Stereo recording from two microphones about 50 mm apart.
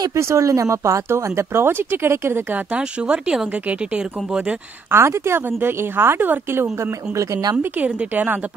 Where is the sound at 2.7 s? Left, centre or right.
Right.